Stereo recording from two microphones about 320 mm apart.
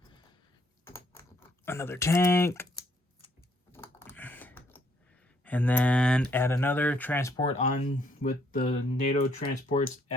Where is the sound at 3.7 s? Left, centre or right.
Centre.